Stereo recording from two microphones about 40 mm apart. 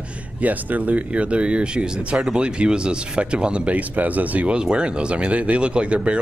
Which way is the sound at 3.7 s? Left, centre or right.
Right.